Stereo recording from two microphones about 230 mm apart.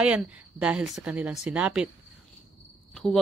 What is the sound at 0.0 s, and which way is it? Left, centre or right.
Speech, centre.